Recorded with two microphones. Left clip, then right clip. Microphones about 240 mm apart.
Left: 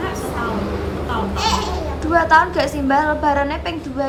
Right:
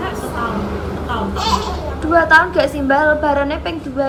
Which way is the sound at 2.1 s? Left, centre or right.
Centre.